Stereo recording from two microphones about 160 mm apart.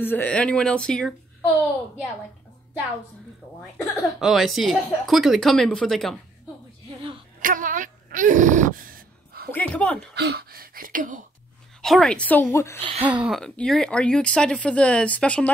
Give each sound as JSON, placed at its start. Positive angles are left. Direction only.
{"t": 0.0, "sound": "speech", "side_deg": 10}
{"t": 3.7, "sound": "a woman's voice", "side_deg": 0}
{"t": 7.4, "sound": "a sound", "side_deg": -55}
{"t": 9.5, "sound": "speech", "side_deg": 10}
{"t": 10.1, "sound": "a sound", "side_deg": -85}
{"t": 11.8, "sound": "speech", "side_deg": 0}
{"t": 12.8, "sound": "speech", "side_deg": -30}
{"t": 13.2, "sound": "speech", "side_deg": 0}